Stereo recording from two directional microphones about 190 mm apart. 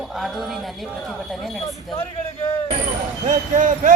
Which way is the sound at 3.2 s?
45° right (ahead or behind).